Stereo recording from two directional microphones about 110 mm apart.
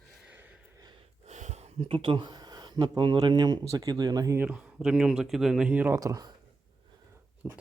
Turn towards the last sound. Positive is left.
turn(degrees=-5)  # may be behind; listen again after turning